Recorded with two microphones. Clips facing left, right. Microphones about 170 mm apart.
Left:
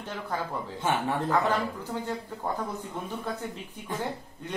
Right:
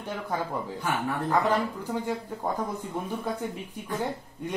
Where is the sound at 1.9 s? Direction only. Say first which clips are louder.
Right 3 dB; 10° right (ahead or behind).